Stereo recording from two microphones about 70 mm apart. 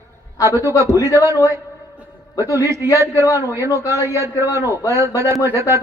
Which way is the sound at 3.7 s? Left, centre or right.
Left.